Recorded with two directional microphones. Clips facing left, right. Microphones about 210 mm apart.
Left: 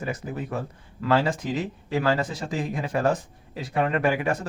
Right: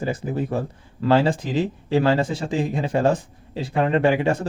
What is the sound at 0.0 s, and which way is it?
A man's voice, 30° right (ahead or behind).